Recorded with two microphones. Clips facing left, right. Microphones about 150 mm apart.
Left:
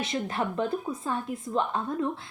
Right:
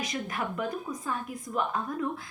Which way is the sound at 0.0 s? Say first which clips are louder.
Left 4 dB; 25° left (ahead or behind).